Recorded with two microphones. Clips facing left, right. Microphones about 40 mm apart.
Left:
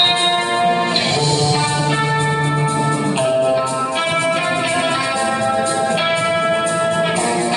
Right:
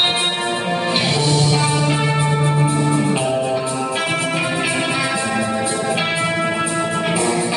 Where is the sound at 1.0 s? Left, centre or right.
Centre.